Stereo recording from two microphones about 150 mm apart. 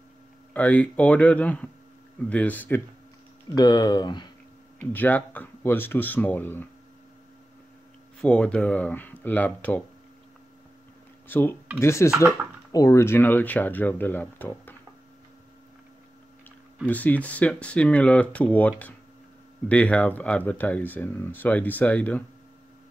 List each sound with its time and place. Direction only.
0.5 s speech: 10° left (ahead or behind)
3.5 s speech: 25° left (ahead or behind)
4.9 s speech: 10° left (ahead or behind)
8.2 s speech: 5° left (ahead or behind)
11.2 s speech: 15° left (ahead or behind)
16.8 s speech: 10° left (ahead or behind)